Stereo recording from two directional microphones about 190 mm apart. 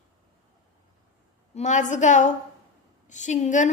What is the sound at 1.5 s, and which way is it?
A woman's voice, 40° left (ahead or behind).